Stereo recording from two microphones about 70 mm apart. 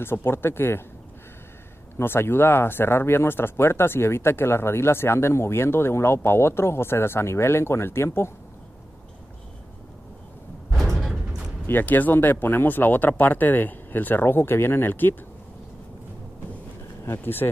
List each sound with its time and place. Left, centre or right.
0.0 s speech: left
2.0 s speech: left
10.8 s music: centre
11.6 s speech: left
17.0 s speech: left